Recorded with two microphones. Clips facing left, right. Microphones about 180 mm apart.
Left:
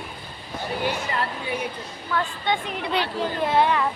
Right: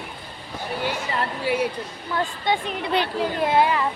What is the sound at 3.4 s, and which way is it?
Speech, 10° right (ahead or behind).